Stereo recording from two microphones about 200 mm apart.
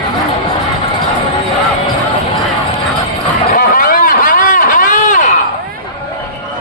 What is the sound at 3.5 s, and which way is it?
Vehicle, 45° left (ahead or behind).